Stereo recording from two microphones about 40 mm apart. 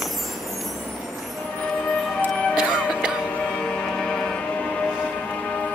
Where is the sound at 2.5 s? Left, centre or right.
Centre.